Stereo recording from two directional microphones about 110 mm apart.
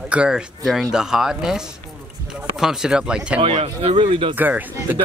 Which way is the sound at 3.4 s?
60° right (ahead or behind).